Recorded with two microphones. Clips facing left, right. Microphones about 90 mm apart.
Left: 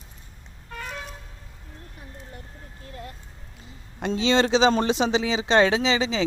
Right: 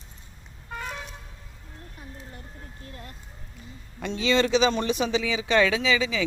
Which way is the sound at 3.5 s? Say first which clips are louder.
Left 1 dB; 20° left (ahead or behind).